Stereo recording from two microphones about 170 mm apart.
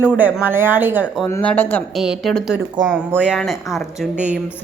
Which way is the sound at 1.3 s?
10° left (ahead or behind).